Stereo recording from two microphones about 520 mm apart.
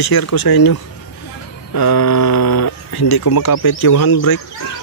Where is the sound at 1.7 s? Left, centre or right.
Left.